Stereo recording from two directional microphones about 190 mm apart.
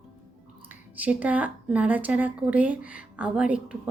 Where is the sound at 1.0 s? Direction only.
10° right (ahead or behind).